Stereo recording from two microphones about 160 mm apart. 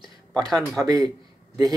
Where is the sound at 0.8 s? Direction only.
25° right (ahead or behind).